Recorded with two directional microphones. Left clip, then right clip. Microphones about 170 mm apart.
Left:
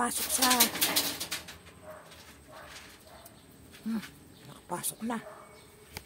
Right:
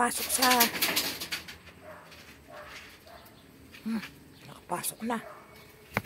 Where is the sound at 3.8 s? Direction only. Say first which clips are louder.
Right 1 dB; 15° left (ahead or behind).